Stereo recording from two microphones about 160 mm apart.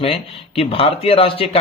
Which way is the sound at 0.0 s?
35° left (ahead or behind).